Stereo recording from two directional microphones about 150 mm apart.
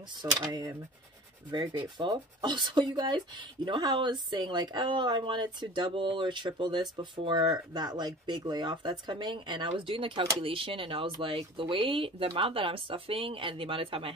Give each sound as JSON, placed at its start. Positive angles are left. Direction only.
{"t": 0.2, "sound": "speech", "side_deg": -30}